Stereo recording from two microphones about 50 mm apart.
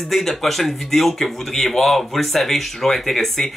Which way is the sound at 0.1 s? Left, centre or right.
Centre.